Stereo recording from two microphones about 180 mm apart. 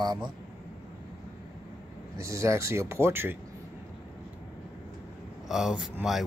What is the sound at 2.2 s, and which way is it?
Speech, 15° right (ahead or behind).